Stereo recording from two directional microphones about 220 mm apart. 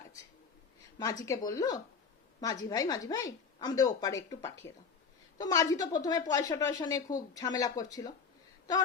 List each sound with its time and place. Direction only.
1.2 s a woman's voice: 15° left (ahead or behind)